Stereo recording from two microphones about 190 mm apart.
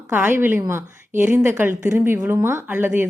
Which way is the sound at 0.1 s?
10° right (ahead or behind).